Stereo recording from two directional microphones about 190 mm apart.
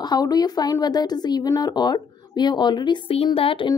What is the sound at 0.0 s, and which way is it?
Speech, 20° left (ahead or behind).